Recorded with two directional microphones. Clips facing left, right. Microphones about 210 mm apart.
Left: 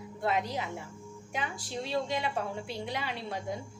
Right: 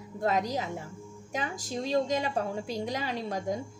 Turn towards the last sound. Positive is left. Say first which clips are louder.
# right 4 dB
turn(degrees=-40)  # may be behind; listen again after turning